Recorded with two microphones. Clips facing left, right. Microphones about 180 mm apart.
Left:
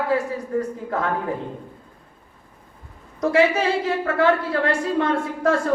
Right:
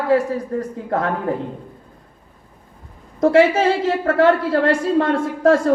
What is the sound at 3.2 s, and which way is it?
A woman's voice, 40° right (ahead or behind).